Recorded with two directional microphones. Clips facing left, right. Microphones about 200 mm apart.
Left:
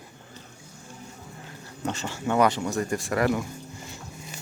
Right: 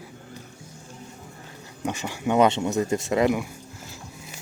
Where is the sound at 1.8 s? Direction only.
15° right (ahead or behind).